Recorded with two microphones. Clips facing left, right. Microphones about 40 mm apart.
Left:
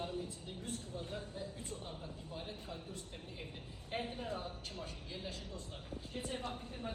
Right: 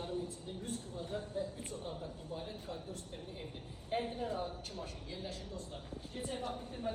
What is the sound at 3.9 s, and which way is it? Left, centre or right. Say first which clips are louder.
Speech: right 4 dB; left.